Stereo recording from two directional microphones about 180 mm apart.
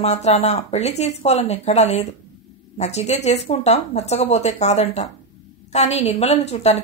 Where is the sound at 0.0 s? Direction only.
40° left (ahead or behind).